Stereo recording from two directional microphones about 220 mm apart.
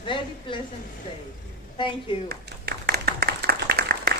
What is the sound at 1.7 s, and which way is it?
Speech, 20° left (ahead or behind).